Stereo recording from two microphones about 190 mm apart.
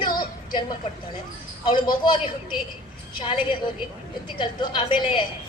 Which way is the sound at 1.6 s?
25° left (ahead or behind).